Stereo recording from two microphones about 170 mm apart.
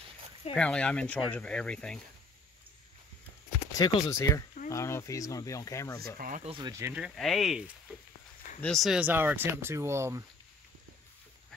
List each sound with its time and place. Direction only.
0.6 s speech: 5° left (ahead or behind)
3.7 s speech: 20° left (ahead or behind)
6.1 s speech: 55° right (ahead or behind)
6.4 s speech: 30° right (ahead or behind)
6.7 s speech: 10° right (ahead or behind)
7.2 s speech: centre (ahead or behind); by 10.2 s 15° right (ahead or behind)